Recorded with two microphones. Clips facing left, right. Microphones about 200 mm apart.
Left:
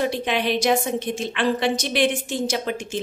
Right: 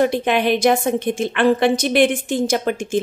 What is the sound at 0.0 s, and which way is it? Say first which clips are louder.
Speech: right 6 dB; 50° right (ahead or behind).